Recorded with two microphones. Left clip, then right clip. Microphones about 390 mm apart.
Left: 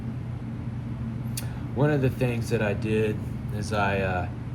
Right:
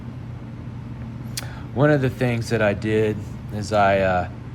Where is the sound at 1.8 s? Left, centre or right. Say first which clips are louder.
Right 7 dB; centre.